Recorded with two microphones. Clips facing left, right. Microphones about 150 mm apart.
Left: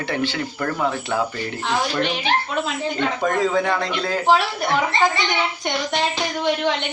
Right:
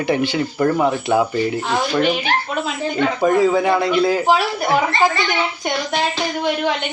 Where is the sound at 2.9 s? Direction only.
5° right (ahead or behind).